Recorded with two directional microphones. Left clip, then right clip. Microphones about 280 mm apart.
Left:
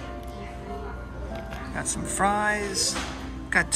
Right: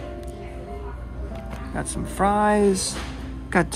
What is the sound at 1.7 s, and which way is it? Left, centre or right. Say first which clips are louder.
Speech: right 1 dB; centre.